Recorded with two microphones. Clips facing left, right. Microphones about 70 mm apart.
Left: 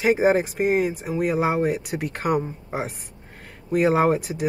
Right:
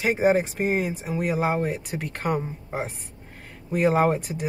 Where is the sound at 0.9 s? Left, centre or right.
Centre.